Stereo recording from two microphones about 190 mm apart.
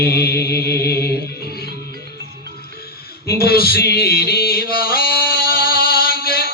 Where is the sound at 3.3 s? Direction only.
55° left (ahead or behind).